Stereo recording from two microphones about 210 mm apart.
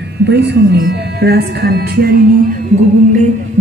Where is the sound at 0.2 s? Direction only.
55° right (ahead or behind).